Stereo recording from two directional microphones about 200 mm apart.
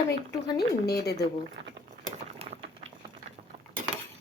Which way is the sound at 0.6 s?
55° left (ahead or behind).